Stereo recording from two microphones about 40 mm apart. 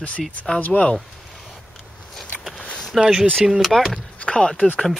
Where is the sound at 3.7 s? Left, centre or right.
Centre.